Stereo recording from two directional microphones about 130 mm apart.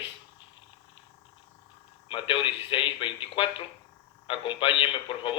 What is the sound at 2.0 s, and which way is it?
A man's voice, 40° left (ahead or behind).